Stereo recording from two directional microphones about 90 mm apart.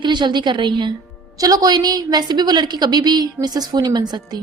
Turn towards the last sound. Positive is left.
turn(degrees=-50)  # may be behind; listen again after turning